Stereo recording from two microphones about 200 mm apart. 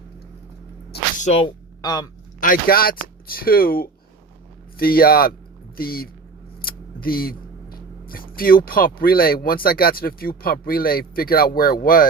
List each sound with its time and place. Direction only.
1.2 s speech: 30° left (ahead or behind)
1.8 s speech: 20° left (ahead or behind)
2.4 s speech: 45° left (ahead or behind)